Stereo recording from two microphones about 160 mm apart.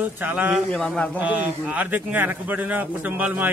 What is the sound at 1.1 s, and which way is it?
A man's voice, 10° right (ahead or behind).